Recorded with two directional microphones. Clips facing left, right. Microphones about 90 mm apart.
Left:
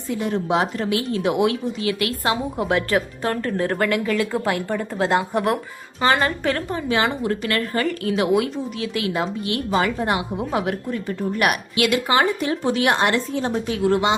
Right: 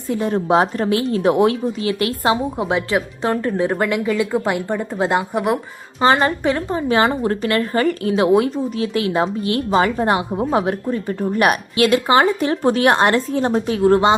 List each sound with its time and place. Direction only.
0.1 s speech: 35° right (ahead or behind); by 5.5 s 15° right (ahead or behind)
6.0 s speech: 30° right (ahead or behind)
6.7 s speech: 35° right (ahead or behind)